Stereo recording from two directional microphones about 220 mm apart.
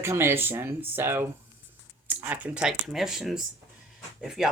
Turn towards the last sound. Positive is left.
turn(degrees=0)  # may be behind; listen again after turning